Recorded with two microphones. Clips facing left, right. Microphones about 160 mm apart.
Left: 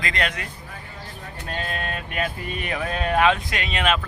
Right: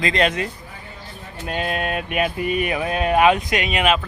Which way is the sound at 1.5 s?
15° right (ahead or behind).